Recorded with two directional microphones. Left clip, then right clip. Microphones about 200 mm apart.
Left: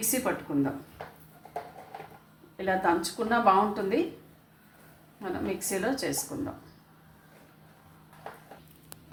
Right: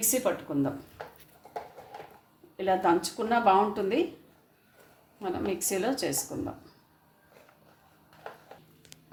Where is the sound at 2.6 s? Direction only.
25° right (ahead or behind).